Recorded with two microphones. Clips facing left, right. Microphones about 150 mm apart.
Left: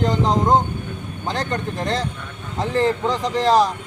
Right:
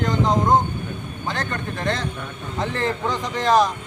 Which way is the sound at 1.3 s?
35° left (ahead or behind).